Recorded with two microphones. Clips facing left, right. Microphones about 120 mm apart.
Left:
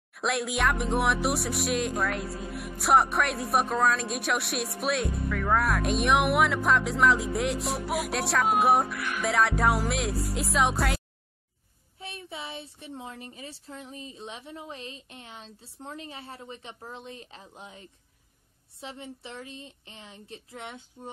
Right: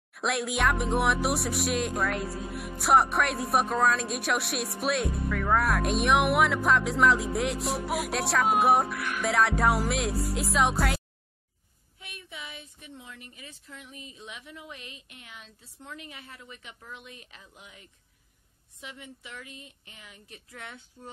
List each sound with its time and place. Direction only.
0.1 s speech: centre (ahead or behind)
12.0 s speech: 30° left (ahead or behind)